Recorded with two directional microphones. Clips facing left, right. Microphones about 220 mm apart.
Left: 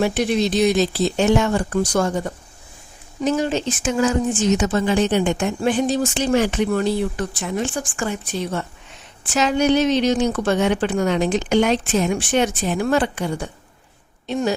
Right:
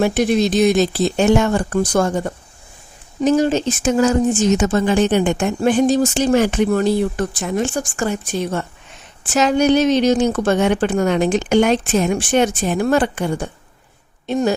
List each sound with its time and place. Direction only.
0.0 s speech: 45° right (ahead or behind)